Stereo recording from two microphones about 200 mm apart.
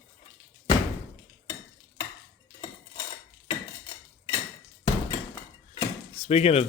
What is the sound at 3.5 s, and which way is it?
Cutlery, 20° left (ahead or behind).